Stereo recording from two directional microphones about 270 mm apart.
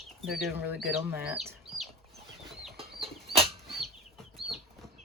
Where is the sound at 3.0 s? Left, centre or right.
Right.